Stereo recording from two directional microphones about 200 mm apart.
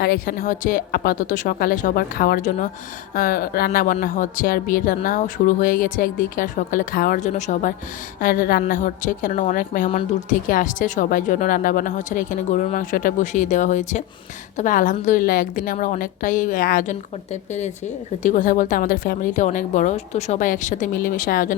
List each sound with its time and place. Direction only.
0.0 s a woman's voice: 50° left (ahead or behind)